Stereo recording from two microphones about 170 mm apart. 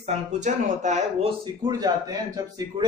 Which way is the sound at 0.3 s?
45° right (ahead or behind).